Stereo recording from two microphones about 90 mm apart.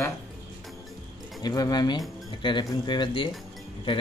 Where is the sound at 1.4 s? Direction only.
45° left (ahead or behind).